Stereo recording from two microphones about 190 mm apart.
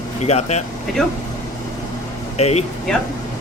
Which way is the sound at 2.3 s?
35° left (ahead or behind).